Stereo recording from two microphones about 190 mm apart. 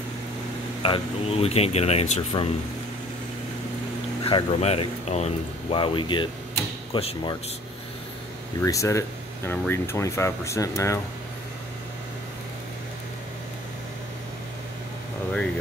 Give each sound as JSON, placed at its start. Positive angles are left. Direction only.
{"t": 0.8, "sound": "speech", "side_deg": 30}
{"t": 4.2, "sound": "speech", "side_deg": 30}
{"t": 8.5, "sound": "speech", "side_deg": 15}